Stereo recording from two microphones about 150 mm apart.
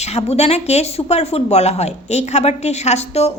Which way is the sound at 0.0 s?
45° left (ahead or behind).